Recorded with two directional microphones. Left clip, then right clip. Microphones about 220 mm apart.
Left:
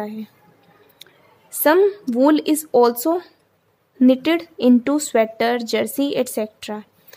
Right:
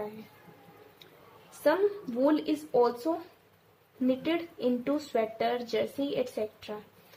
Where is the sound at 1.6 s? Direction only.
50° left (ahead or behind).